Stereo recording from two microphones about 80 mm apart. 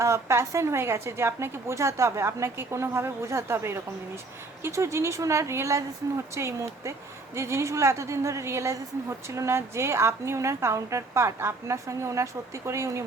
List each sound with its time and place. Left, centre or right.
0.0 s a woman's voice: right